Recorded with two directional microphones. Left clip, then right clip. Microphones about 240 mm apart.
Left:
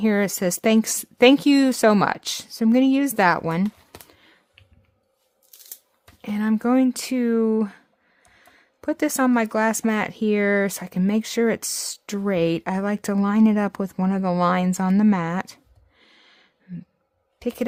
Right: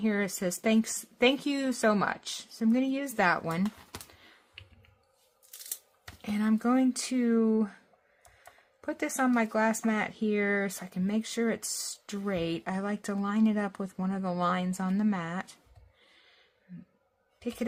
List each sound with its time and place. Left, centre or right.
0.0 s speech: left
4.1 s computer keyboard: left
6.2 s speech: left
8.8 s speech: left
16.0 s a sound: left
17.4 s speech: left